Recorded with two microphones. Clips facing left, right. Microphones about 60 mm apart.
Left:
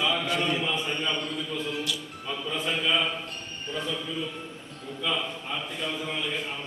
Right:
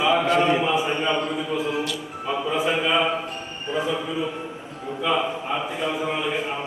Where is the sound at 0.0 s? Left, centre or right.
Centre.